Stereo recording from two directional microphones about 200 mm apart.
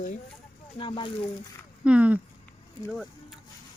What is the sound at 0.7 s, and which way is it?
Speech, 25° left (ahead or behind).